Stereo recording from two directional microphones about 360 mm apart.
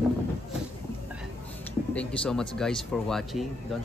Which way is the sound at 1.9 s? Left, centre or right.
Centre.